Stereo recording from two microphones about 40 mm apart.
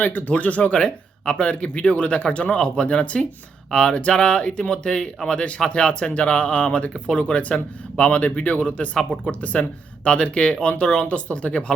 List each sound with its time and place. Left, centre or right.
0.0 s speech: left
0.7 s speech: left
3.7 s speech: centre